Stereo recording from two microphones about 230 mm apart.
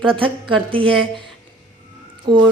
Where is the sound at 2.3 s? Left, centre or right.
Centre.